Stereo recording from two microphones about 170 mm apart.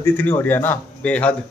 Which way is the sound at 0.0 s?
10° left (ahead or behind).